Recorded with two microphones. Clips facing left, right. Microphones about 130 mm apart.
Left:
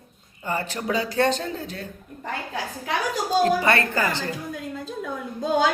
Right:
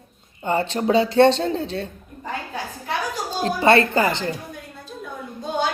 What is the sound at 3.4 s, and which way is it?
Speech, 25° right (ahead or behind).